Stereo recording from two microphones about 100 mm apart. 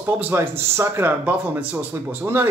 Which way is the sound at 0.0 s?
20° right (ahead or behind).